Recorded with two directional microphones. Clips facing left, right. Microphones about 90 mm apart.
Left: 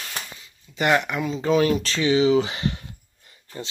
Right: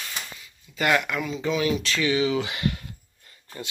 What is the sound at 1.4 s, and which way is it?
Speech, 40° left (ahead or behind).